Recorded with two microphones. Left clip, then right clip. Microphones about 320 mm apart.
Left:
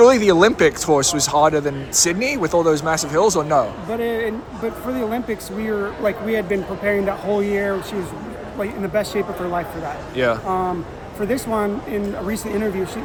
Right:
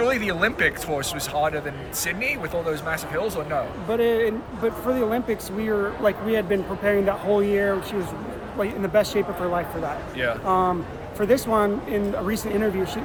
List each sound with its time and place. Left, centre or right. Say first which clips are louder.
0.0 s speech: left 10 dB; centre
3.9 s speech: right 2 dB; centre